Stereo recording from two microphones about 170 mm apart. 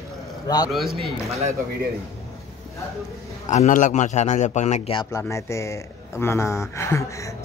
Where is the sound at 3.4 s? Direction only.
45° left (ahead or behind).